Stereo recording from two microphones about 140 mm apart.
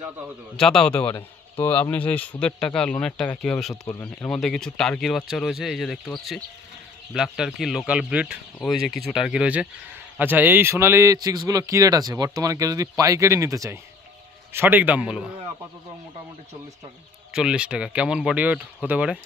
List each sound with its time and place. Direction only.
0.6 s speech: 5° left (ahead or behind)
8.5 s a man's voice: centre (ahead or behind)
17.3 s speech: 5° right (ahead or behind)